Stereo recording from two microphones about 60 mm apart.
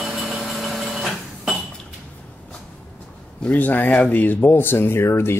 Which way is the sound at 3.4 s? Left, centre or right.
Left.